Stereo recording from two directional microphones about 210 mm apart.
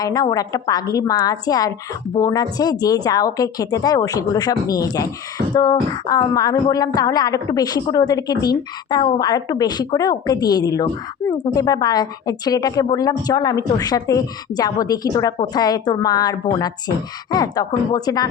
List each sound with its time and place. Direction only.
0.0 s speech: 20° left (ahead or behind)